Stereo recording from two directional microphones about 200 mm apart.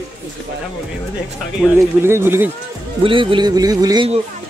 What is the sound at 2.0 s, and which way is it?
Speech, 10° right (ahead or behind).